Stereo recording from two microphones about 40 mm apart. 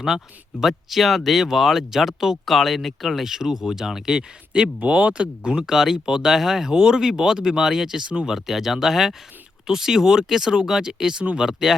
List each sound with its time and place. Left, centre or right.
0.6 s speech: centre
4.8 s speech: right
5.7 s speech: centre